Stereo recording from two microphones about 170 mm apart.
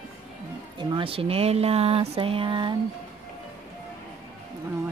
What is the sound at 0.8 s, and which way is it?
Speech, 30° right (ahead or behind).